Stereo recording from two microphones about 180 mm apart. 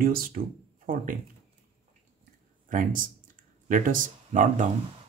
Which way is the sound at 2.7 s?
50° right (ahead or behind).